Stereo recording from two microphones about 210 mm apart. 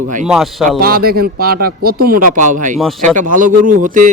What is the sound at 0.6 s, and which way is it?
A man's voice, 45° right (ahead or behind).